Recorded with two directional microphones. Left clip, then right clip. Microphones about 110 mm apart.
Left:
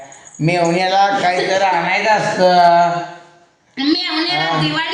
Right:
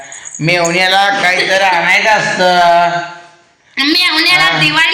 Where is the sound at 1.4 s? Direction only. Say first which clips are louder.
Right 5 dB; 5° left (ahead or behind).